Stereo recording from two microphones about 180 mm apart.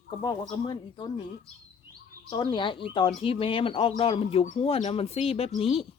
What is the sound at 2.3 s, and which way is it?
Speech, 25° left (ahead or behind).